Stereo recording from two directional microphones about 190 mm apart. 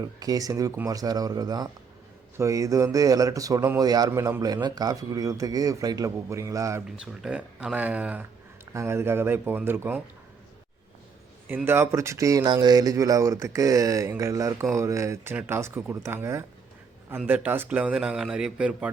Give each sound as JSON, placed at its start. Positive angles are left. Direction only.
{"t": 0.0, "sound": "speech", "side_deg": -20}
{"t": 6.8, "sound": "speech", "side_deg": -5}
{"t": 11.4, "sound": "speech", "side_deg": -10}